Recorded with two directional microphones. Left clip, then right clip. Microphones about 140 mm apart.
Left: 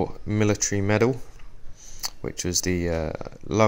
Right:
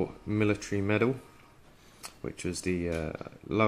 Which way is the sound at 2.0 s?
35° left (ahead or behind).